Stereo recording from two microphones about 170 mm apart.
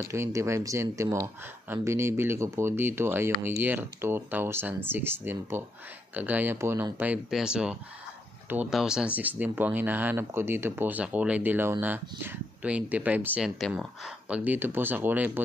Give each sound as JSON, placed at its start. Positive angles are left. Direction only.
{"t": 0.1, "sound": "speech", "side_deg": -15}